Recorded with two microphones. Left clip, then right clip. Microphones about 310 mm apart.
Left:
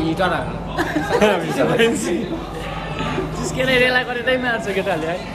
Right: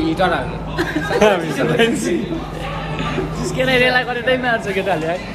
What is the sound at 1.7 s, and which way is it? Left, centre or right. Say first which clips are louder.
Speech: right 3 dB; centre.